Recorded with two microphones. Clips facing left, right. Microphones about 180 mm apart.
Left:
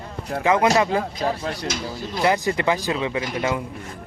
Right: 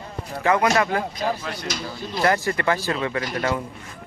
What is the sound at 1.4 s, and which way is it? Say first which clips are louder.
Speech: left 4 dB; 35° left (ahead or behind).